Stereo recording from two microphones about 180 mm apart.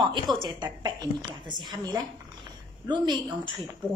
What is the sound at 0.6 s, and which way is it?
A woman's voice, 25° right (ahead or behind).